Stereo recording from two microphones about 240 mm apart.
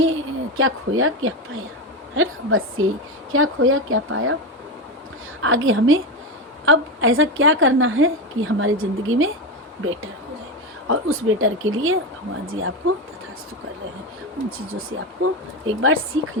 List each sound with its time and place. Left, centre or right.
0.0 s a woman's voice: right
5.4 s a woman's voice: right
14.7 s a woman's voice: right